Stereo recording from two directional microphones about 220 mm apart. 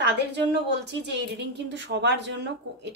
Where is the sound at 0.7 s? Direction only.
50° right (ahead or behind).